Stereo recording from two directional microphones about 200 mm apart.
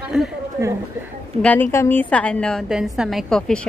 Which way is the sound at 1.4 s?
10° left (ahead or behind).